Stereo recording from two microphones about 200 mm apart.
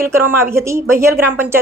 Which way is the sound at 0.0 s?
10° right (ahead or behind).